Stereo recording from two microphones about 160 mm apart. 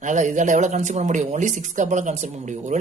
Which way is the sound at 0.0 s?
50° right (ahead or behind).